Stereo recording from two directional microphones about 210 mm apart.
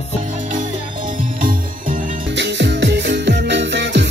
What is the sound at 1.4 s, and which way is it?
Music, 40° right (ahead or behind).